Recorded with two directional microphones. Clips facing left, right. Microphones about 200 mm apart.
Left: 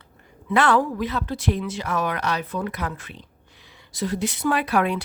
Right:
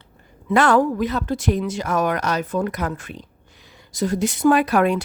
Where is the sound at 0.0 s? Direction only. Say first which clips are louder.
Even; 40° right (ahead or behind).